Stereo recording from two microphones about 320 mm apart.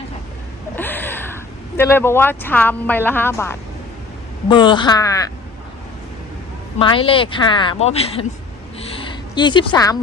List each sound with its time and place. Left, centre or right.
0.8 s speech: centre
6.7 s speech: centre
8.8 s a sound: centre